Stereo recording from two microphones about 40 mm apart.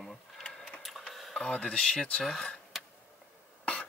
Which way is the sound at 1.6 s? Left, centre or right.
Left.